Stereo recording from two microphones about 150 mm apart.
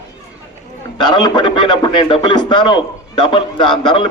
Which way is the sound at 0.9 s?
30° left (ahead or behind).